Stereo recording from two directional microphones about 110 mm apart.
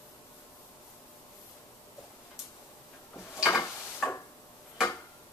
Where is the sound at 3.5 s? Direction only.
25° left (ahead or behind).